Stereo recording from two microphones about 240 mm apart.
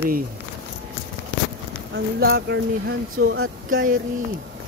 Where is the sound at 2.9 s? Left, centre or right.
Right.